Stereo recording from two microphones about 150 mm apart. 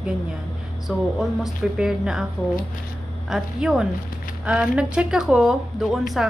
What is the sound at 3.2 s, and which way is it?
A woman's voice, 5° right (ahead or behind).